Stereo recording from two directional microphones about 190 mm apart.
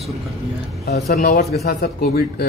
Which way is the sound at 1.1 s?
50° left (ahead or behind).